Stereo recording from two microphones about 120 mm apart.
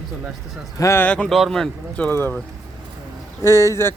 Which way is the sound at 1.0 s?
10° left (ahead or behind).